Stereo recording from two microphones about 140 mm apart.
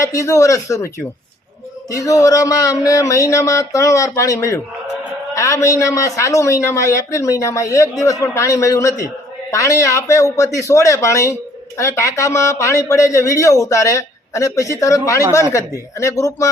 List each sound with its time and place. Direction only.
0.0 s speech: 20° left (ahead or behind)